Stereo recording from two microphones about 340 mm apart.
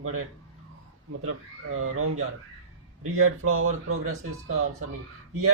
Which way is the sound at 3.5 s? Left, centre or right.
Right.